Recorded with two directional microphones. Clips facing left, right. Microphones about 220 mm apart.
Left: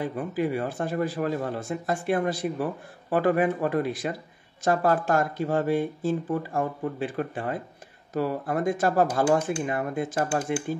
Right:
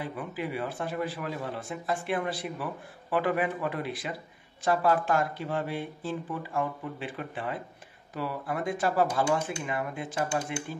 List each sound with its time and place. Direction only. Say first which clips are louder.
0.0 s speech: left 7 dB; 45° left (ahead or behind)